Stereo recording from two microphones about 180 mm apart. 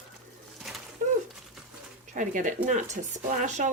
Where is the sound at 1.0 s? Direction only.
45° right (ahead or behind).